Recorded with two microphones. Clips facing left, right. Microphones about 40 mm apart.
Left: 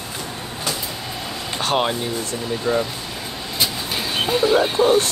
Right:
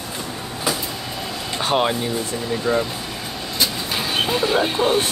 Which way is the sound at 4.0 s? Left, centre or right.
Centre.